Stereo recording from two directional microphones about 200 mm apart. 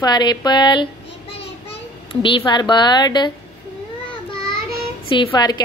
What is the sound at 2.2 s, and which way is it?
A child's voice, 25° left (ahead or behind).